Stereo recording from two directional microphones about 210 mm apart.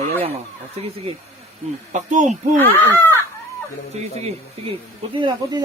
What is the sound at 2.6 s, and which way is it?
Speech, 10° left (ahead or behind).